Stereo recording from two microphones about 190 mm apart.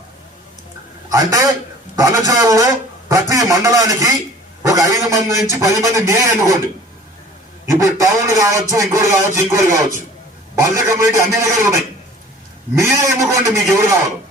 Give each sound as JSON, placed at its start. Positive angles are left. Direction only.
{"t": 1.1, "sound": "a man's voice", "side_deg": -15}
{"t": 7.7, "sound": "a man's voice", "side_deg": -15}
{"t": 12.7, "sound": "a man's voice", "side_deg": -15}